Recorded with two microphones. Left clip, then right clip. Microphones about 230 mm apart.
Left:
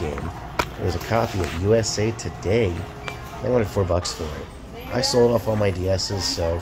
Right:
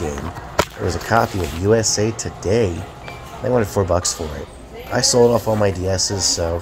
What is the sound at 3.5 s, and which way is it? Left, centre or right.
Speech, centre.